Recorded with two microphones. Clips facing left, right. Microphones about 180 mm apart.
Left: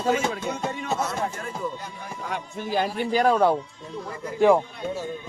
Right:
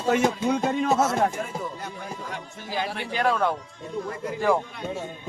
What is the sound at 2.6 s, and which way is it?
Speech, 50° left (ahead or behind).